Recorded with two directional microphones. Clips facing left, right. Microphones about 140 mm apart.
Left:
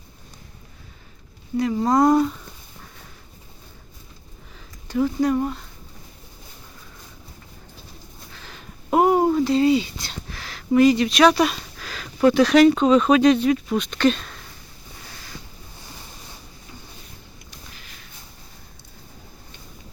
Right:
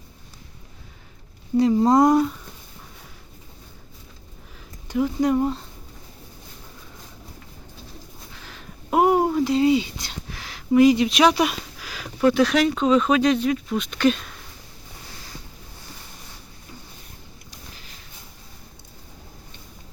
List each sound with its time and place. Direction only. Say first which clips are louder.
1.5 s speech: right 3 dB; 25° right (ahead or behind)
2.1 s speech: even; centre (ahead or behind)
4.9 s speech: even; 15° right (ahead or behind)
8.4 s a sound: left 3 dB; 5° right (ahead or behind)
10.8 s speech: even; 15° right (ahead or behind)